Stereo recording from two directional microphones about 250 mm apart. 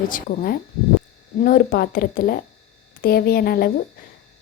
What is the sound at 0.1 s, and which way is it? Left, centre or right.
Speech, left.